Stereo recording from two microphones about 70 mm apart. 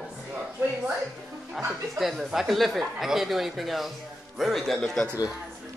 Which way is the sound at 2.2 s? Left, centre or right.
Centre.